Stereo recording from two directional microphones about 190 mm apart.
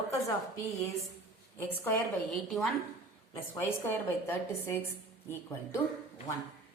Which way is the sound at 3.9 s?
10° left (ahead or behind).